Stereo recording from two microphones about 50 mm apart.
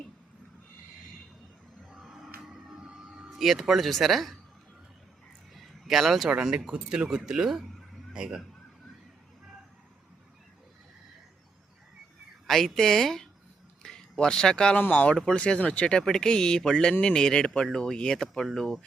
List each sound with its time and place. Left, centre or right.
1.9 s a sound: centre
3.2 s speech: centre
5.5 s a sound: centre
6.7 s speech: centre
12.5 s speech: centre
14.8 s speech: left
15.1 s speech: centre
15.4 s speech: left
15.9 s speech: centre